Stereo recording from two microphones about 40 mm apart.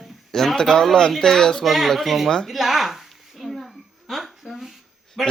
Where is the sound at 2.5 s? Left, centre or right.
Centre.